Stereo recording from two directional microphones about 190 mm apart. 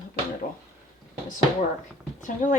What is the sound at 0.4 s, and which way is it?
Speech, 45° left (ahead or behind).